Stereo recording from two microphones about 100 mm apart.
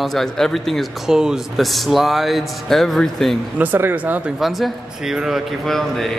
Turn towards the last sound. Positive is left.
turn(degrees=5)  # may be behind; listen again after turning